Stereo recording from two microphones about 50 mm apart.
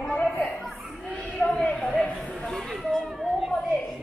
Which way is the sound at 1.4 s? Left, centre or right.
Centre.